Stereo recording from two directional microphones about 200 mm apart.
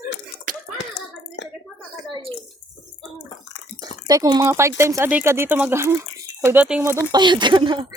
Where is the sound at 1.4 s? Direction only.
60° left (ahead or behind).